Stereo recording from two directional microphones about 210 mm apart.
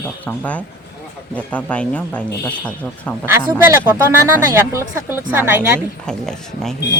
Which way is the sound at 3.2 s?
10° right (ahead or behind).